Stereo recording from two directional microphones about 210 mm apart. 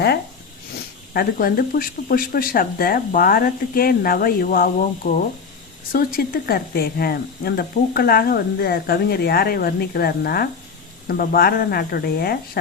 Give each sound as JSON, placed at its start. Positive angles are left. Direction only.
{"t": 1.1, "sound": "speech", "side_deg": 45}